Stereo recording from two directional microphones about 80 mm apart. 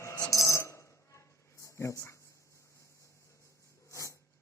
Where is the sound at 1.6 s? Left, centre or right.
Left.